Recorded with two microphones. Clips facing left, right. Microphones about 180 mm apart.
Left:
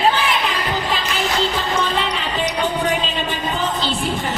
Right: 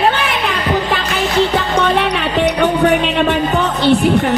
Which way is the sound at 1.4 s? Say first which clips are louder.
Right 9 dB; 65° right (ahead or behind).